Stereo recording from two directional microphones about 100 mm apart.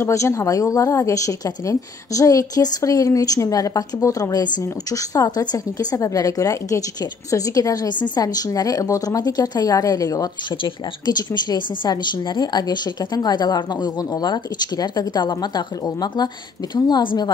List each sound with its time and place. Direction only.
0.0 s a woman's voice: 30° left (ahead or behind)
10.5 s speech: 50° left (ahead or behind)